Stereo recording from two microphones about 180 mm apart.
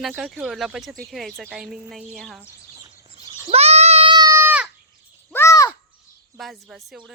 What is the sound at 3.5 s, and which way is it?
Goat, 35° right (ahead or behind).